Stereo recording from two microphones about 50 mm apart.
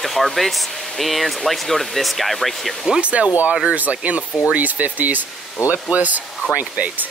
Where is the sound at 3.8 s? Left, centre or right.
Right.